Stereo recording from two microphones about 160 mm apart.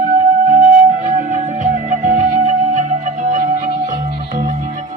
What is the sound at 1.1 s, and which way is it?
Music, 50° right (ahead or behind).